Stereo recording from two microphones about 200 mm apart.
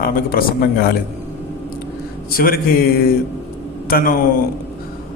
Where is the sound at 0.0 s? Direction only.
45° left (ahead or behind).